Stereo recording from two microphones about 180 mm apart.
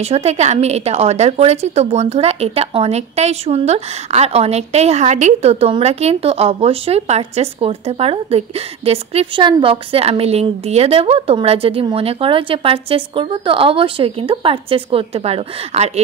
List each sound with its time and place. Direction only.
0.0 s a woman's voice: 35° right (ahead or behind)